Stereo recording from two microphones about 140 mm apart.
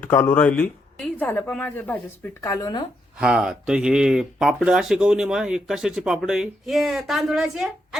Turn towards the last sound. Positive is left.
turn(degrees=0)  # may be behind; listen again after turning